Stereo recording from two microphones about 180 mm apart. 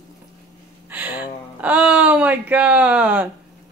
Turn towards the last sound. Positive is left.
turn(degrees=-10)  # may be behind; listen again after turning